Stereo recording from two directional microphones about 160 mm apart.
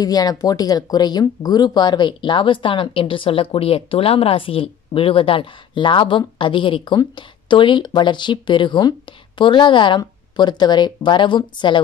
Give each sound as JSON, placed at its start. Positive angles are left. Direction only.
{"t": 0.0, "sound": "speech", "side_deg": 25}